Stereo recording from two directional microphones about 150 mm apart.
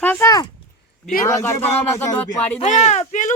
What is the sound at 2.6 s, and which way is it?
Speech, 50° left (ahead or behind).